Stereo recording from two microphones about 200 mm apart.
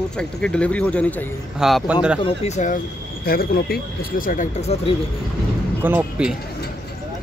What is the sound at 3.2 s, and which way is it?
Speech, 50° left (ahead or behind).